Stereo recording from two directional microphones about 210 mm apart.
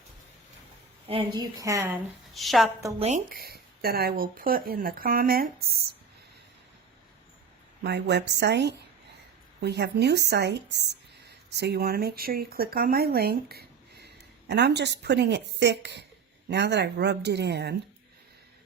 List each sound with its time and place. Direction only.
1.0 s a woman's voice: 25° right (ahead or behind)
2.3 s a woman's voice: centre (ahead or behind)
3.0 s speech: 35° right (ahead or behind)
3.3 s speech: 45° right (ahead or behind)
7.9 s speech: 55° right (ahead or behind)